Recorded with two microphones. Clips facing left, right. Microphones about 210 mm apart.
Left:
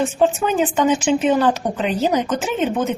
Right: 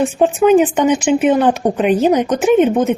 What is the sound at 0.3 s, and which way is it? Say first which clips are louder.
A woman's voice: right 8 dB; 15° right (ahead or behind).